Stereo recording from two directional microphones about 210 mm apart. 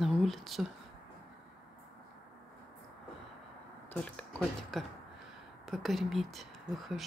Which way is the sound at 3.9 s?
5° left (ahead or behind).